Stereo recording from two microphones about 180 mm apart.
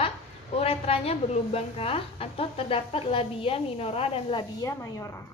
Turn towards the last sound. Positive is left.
turn(degrees=20)  # may be behind; listen again after turning